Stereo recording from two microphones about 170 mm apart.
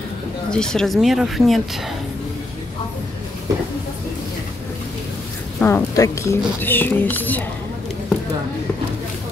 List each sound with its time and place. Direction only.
0.5 s speech: 5° left (ahead or behind)
5.6 s a woman's voice: 15° left (ahead or behind)